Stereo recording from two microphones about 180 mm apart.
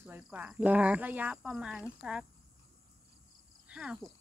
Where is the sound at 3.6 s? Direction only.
5° right (ahead or behind).